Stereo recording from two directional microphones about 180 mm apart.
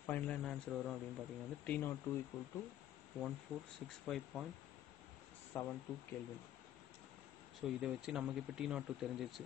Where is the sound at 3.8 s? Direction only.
Centre (ahead or behind).